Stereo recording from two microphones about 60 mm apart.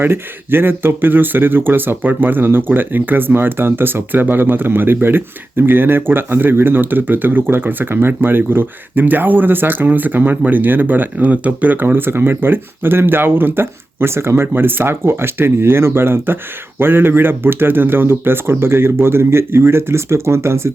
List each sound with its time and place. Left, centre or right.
0.0 s speech: right